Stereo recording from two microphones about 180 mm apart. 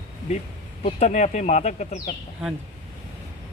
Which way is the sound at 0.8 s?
40° left (ahead or behind).